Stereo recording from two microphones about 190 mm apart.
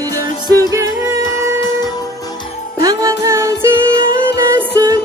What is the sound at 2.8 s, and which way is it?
Music, 20° right (ahead or behind).